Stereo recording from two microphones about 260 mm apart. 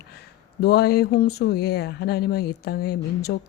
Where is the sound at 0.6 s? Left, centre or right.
Left.